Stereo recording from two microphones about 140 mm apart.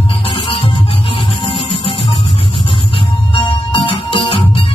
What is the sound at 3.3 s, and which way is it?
Music, 40° left (ahead or behind).